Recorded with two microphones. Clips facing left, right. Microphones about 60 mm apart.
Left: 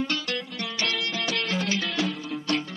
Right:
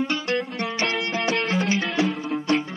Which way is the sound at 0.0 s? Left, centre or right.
Right.